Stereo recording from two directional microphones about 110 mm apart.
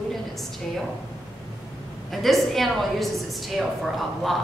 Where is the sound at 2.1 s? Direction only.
Centre (ahead or behind).